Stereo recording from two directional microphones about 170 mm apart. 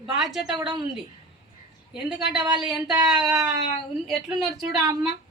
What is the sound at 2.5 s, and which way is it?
Speech, 5° right (ahead or behind).